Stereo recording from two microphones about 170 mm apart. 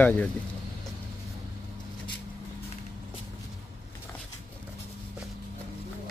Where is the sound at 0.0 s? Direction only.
10° left (ahead or behind).